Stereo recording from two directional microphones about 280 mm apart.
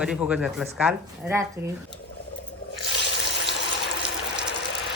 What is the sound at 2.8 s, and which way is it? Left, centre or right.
Water, left.